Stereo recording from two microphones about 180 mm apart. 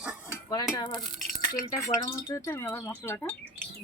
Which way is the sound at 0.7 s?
25° left (ahead or behind).